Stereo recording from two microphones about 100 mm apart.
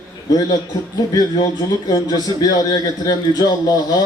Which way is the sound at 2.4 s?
40° left (ahead or behind).